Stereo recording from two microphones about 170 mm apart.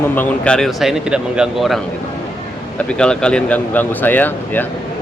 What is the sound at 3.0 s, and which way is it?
Speech, 5° left (ahead or behind).